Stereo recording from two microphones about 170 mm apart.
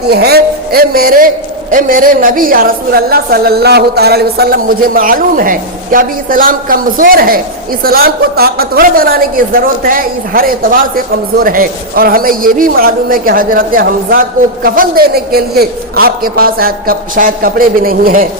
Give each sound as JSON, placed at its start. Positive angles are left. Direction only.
{"t": 0.1, "sound": "a woman's voice", "side_deg": -70}